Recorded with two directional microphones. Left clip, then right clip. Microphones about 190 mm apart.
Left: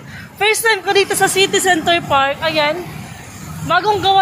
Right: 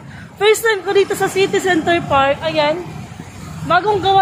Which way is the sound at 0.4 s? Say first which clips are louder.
Right 1 dB; 15° right (ahead or behind).